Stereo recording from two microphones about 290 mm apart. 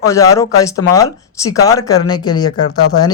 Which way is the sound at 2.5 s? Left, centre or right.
Left.